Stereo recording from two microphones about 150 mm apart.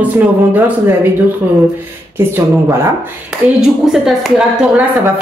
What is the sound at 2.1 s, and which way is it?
Speech, 15° right (ahead or behind).